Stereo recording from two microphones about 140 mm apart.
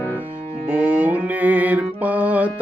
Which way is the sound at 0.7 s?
10° right (ahead or behind).